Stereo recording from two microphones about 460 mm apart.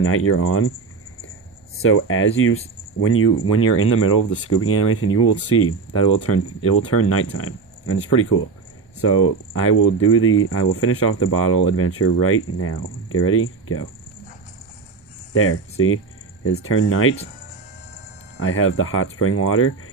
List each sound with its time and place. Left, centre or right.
0.0 s speech: left
1.8 s speech: left
15.3 s speech: left
18.3 s speech: left